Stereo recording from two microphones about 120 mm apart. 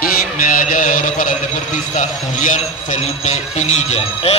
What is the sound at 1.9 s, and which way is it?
A man's voice, 85° left.